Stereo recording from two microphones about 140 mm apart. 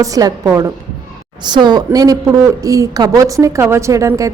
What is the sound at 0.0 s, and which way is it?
A woman's voice, 25° right (ahead or behind).